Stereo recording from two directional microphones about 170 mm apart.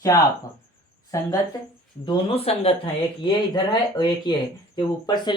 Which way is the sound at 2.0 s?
30° left (ahead or behind).